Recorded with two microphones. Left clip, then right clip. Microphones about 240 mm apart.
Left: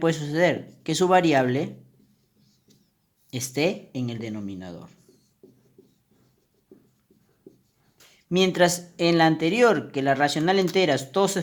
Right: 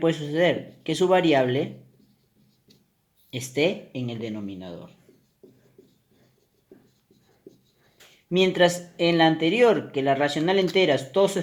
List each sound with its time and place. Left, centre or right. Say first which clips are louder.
0.0 s speech: even; left
3.2 s speech: right 1 dB; left
8.3 s speech: right 1 dB; left